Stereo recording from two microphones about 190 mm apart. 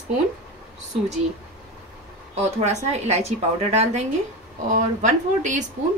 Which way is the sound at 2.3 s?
35° right (ahead or behind).